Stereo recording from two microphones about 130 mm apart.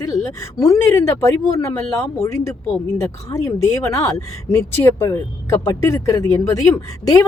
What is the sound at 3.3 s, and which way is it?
Speech, 25° left (ahead or behind).